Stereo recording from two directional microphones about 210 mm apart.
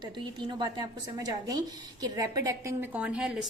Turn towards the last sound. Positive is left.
turn(degrees=0)  # may be behind; listen again after turning